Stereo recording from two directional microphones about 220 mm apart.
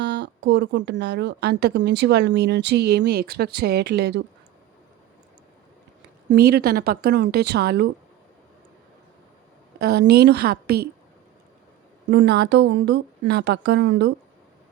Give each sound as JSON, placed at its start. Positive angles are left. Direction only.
{"t": 0.0, "sound": "speech", "side_deg": -55}
{"t": 6.2, "sound": "speech", "side_deg": -45}
{"t": 9.7, "sound": "speech", "side_deg": -45}
{"t": 12.1, "sound": "speech", "side_deg": -50}